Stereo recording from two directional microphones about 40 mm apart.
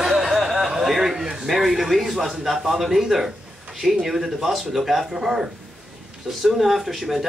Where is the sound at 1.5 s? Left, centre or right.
Centre.